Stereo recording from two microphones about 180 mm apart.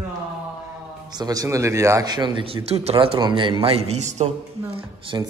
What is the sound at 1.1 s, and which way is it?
A man's voice, 20° right (ahead or behind).